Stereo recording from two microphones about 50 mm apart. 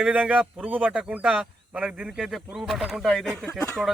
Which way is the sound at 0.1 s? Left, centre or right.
Right.